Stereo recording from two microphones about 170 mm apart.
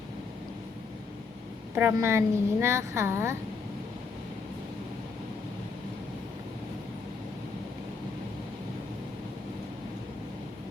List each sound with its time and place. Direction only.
1.7 s a woman's voice: 15° right (ahead or behind)